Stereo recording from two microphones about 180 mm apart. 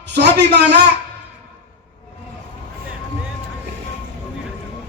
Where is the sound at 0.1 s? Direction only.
70° right (ahead or behind).